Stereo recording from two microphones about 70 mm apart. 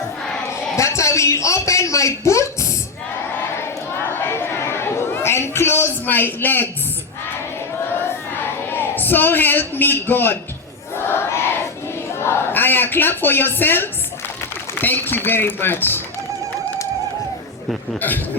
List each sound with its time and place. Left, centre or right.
0.8 s a man's voice: left
3.3 s chatter: left
8.0 s a sound: left
12.2 s a man's voice: left